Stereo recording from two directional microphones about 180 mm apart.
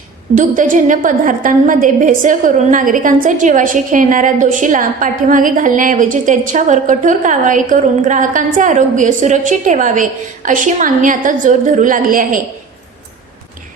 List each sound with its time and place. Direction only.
0.3 s a woman's voice: 45° right (ahead or behind)